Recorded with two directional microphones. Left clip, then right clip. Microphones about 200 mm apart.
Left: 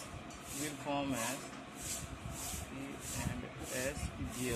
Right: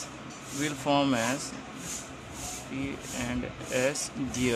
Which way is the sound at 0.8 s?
30° right (ahead or behind).